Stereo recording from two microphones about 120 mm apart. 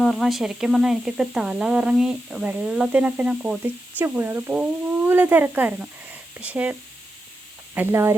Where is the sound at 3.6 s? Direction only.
15° right (ahead or behind).